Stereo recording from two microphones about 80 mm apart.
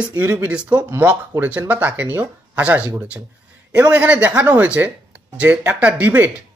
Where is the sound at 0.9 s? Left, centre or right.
Right.